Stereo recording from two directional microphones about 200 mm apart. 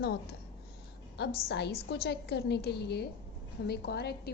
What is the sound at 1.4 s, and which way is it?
A woman's voice, 55° left (ahead or behind).